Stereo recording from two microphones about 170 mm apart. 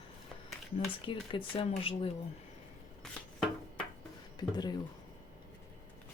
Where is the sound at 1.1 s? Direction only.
30° left (ahead or behind).